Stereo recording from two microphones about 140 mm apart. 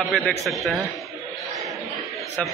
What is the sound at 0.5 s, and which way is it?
Speech, centre (ahead or behind).